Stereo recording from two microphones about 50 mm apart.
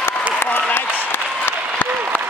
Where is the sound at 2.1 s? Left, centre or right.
Left.